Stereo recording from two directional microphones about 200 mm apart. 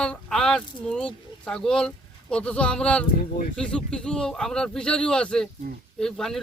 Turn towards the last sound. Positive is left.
turn(degrees=0)  # may be behind; listen again after turning